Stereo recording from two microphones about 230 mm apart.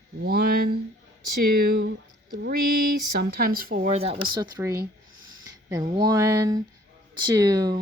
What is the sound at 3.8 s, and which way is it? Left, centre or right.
Speech, right.